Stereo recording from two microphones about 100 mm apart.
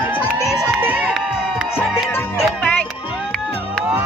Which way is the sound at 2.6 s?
15° left (ahead or behind).